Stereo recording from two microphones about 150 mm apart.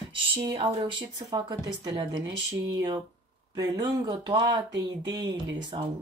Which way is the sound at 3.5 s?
30° right (ahead or behind).